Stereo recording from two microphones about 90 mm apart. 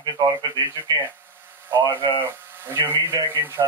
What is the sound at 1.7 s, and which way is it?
Speech, 25° right (ahead or behind).